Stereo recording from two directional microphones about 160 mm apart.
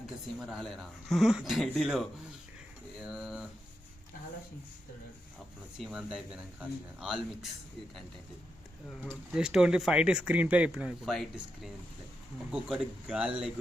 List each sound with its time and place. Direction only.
0.3 s speech: centre (ahead or behind)
3.1 s a sound: 5° right (ahead or behind)
5.8 s speech: 5° right (ahead or behind)
9.0 s speech: 10° right (ahead or behind)